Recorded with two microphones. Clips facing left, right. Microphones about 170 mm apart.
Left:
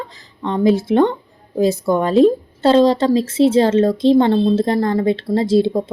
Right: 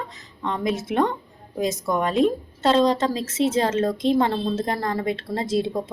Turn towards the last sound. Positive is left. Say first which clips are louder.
# left 8 dB
turn(degrees=30)  # may be behind; listen again after turning